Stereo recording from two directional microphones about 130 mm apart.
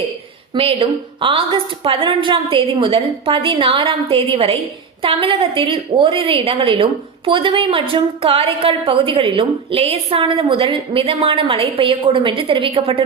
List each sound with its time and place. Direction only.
0.5 s a woman's voice: 45° right (ahead or behind)